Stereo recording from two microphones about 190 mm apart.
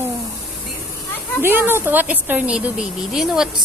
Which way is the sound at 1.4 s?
10° right (ahead or behind).